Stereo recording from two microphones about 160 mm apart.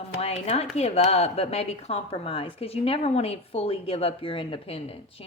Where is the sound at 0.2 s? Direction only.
40° left (ahead or behind).